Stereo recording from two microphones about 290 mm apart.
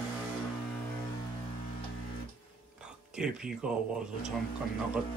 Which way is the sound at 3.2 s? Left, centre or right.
Centre.